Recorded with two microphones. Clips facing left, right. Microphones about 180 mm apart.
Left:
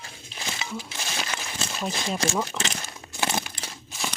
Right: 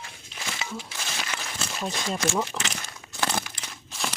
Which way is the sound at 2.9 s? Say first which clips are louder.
Right 1 dB; 15° left (ahead or behind).